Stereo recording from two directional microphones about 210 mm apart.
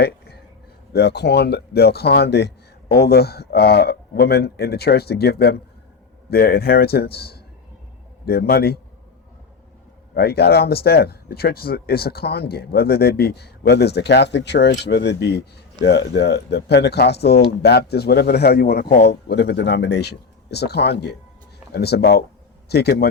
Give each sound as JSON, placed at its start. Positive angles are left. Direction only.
{"t": 0.9, "sound": "speech", "side_deg": 50}
{"t": 10.2, "sound": "speech", "side_deg": 50}